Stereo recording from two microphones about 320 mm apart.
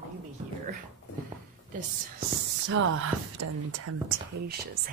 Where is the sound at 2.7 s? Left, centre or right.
Right.